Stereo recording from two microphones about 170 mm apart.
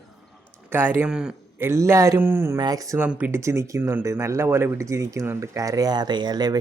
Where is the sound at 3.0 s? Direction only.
10° right (ahead or behind).